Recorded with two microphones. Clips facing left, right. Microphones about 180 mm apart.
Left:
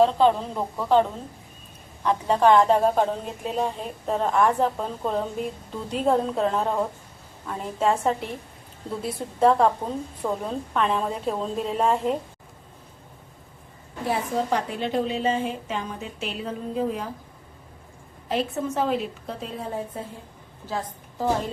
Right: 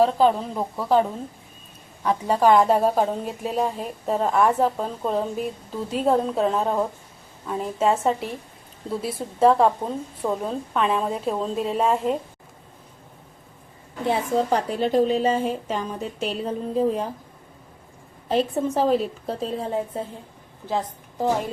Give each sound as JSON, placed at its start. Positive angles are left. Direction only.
{"t": 0.0, "sound": "a woman's voice", "side_deg": -5}
{"t": 2.0, "sound": "a woman's voice", "side_deg": -5}
{"t": 14.1, "sound": "a woman's voice", "side_deg": -35}
{"t": 18.3, "sound": "a woman's voice", "side_deg": -30}
{"t": 20.7, "sound": "a woman's voice", "side_deg": -20}